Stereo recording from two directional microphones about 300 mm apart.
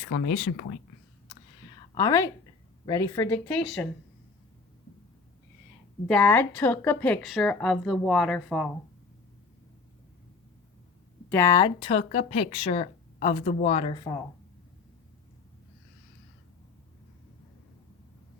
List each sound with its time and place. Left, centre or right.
0.1 s speech: left
2.0 s a woman's voice: centre
6.1 s a woman's voice: centre
11.3 s speech: centre